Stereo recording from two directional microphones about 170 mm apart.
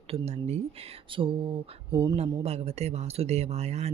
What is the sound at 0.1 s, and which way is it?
Speech, 40° right (ahead or behind).